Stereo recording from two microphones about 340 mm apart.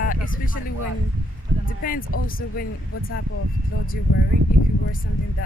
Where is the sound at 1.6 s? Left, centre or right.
Left.